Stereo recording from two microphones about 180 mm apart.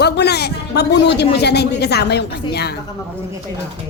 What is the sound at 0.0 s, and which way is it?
Speech, 65° left (ahead or behind).